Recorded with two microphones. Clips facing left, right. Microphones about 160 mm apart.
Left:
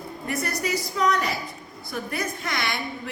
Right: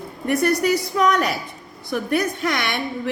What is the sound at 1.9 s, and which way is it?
A woman's voice, 75° right (ahead or behind).